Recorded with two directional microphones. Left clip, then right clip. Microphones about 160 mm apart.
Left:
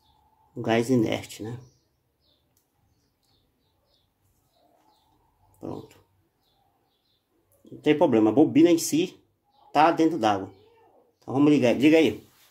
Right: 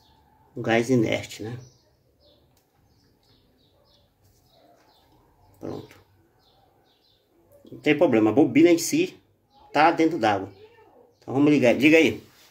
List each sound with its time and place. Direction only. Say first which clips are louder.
0.6 s speech: right 2 dB; 45° left (ahead or behind)
5.6 s speech: right 2 dB; 40° left (ahead or behind)
7.8 s speech: right 1 dB; 40° left (ahead or behind)